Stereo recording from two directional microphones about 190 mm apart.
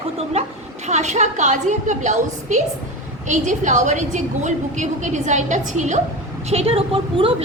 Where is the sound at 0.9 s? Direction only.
35° right (ahead or behind).